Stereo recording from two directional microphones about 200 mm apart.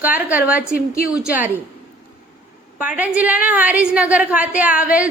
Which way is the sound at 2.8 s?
5° right (ahead or behind).